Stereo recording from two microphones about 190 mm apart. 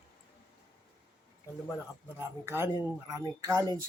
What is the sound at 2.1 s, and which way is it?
Speech, 15° right (ahead or behind).